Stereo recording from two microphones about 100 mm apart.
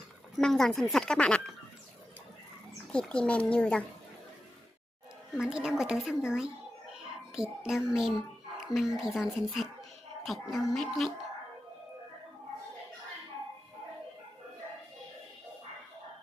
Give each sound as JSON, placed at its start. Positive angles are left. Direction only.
{"t": 0.3, "sound": "speech", "side_deg": 5}
{"t": 2.8, "sound": "a child's voice", "side_deg": 10}
{"t": 5.3, "sound": "a woman's voice", "side_deg": -5}
{"t": 6.9, "sound": "a sound", "side_deg": -5}
{"t": 8.5, "sound": "speech", "side_deg": -5}